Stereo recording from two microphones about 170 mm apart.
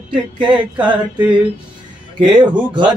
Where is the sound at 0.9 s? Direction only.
5° right (ahead or behind).